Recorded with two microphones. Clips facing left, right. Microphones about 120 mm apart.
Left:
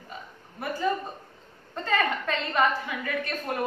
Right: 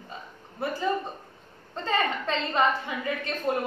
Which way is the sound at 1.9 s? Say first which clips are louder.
Left 1 dB; 25° right (ahead or behind).